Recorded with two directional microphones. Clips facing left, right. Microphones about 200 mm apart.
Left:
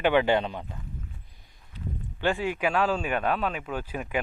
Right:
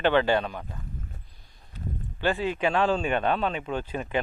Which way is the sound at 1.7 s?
45° right (ahead or behind).